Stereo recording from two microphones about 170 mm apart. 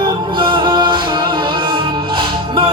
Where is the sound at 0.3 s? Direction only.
30° right (ahead or behind).